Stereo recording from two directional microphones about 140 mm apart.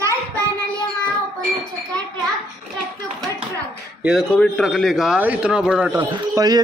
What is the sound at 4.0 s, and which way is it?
A man's voice, centre (ahead or behind).